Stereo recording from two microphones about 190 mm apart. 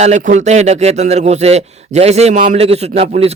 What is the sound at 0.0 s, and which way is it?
A man's voice, 40° right (ahead or behind).